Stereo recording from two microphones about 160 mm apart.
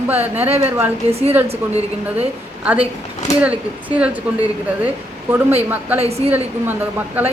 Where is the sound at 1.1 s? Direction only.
40° right (ahead or behind).